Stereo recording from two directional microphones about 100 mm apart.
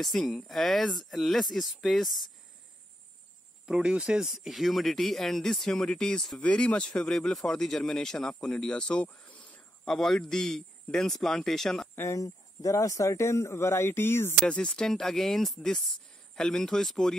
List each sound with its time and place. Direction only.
0.0 s speech: centre (ahead or behind)
3.6 s speech: 5° right (ahead or behind)
11.9 s speech: 25° left (ahead or behind)
14.4 s speech: 5° left (ahead or behind)